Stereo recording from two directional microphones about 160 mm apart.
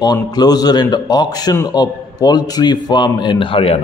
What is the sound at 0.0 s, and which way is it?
A man's voice, 25° left (ahead or behind).